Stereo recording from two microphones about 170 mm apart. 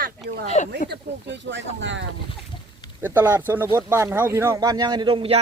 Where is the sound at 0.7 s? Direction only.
85° right.